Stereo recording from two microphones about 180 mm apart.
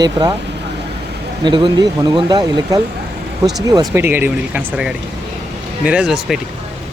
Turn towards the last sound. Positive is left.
turn(degrees=0)  # may be behind; listen again after turning